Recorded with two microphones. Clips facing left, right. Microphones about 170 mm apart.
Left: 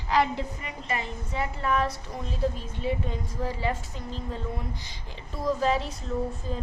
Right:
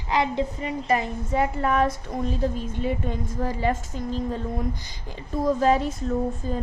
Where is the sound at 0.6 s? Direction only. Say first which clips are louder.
Right 9 dB; 40° right (ahead or behind).